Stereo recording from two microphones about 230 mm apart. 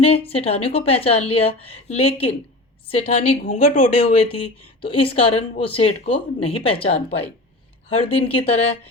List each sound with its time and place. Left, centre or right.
0.0 s speech: left
4.0 s speech: left